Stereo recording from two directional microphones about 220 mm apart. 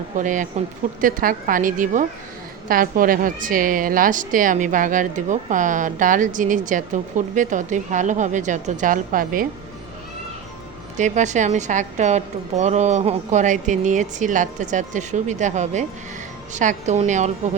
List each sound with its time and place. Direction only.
0.2 s a woman's voice: 35° right (ahead or behind)
10.9 s a woman's voice: 35° right (ahead or behind)